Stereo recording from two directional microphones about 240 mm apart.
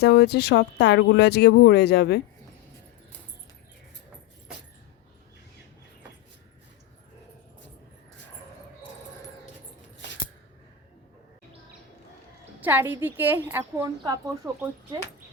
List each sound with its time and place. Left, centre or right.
0.0 s speech: left
12.6 s a woman's voice: centre